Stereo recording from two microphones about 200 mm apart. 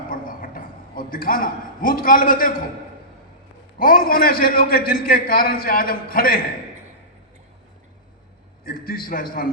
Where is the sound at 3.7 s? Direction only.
45° left (ahead or behind).